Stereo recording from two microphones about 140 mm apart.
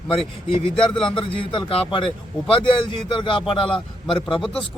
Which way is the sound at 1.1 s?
40° left (ahead or behind).